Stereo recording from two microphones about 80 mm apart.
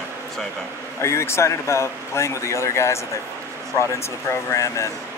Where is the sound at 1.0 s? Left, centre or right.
Left.